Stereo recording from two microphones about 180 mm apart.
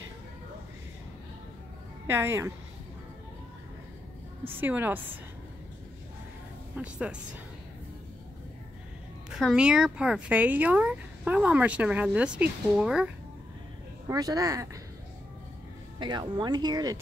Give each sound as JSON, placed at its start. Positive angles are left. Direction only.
{"t": 2.0, "sound": "speech", "side_deg": -15}
{"t": 4.6, "sound": "speech", "side_deg": -10}
{"t": 6.7, "sound": "speech", "side_deg": -5}
{"t": 9.3, "sound": "speech", "side_deg": -5}
{"t": 14.0, "sound": "speech", "side_deg": -20}
{"t": 16.0, "sound": "speech", "side_deg": -25}